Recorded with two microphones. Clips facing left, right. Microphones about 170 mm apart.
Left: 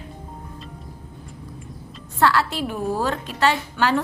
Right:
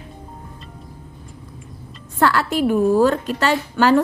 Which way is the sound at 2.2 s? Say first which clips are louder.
Right 3 dB; 45° right (ahead or behind).